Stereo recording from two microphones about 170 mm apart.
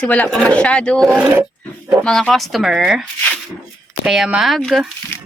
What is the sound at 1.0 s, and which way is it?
Speech, 10° right (ahead or behind).